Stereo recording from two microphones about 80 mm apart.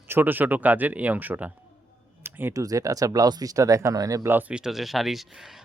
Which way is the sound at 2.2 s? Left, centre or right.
Right.